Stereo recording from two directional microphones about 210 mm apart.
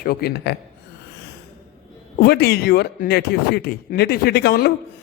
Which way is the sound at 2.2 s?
50° left (ahead or behind).